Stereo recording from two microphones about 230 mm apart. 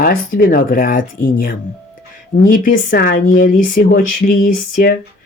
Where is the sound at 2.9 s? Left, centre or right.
Left.